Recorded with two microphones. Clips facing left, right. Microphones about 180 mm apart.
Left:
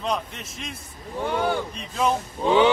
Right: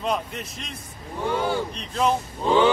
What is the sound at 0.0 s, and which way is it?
Speech, centre (ahead or behind).